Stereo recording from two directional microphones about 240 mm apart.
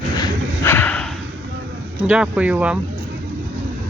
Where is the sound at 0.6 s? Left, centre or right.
Centre.